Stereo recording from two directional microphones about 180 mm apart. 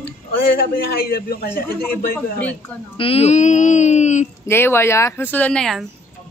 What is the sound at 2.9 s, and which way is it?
Speech, 30° left (ahead or behind).